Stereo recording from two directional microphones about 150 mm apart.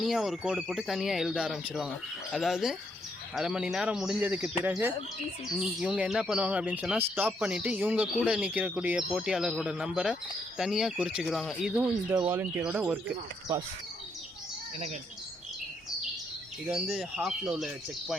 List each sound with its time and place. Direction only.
0.0 s speech: centre (ahead or behind); by 13.7 s 15° right (ahead or behind)
16.6 s speech: 10° right (ahead or behind)